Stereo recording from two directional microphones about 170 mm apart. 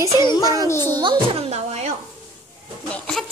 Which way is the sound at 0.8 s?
25° right (ahead or behind).